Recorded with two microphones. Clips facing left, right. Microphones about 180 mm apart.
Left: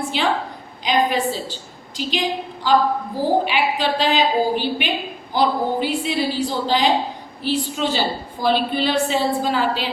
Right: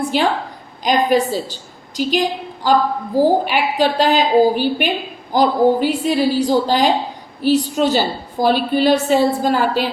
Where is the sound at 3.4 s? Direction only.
45° right (ahead or behind).